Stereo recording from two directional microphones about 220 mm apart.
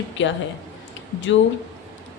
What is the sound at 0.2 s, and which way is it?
Speech, 55° left (ahead or behind).